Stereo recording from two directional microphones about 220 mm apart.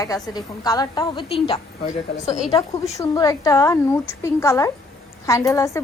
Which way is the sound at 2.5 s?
15° left (ahead or behind).